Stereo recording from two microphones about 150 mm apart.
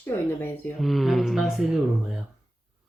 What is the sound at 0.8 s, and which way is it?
Speech, centre (ahead or behind).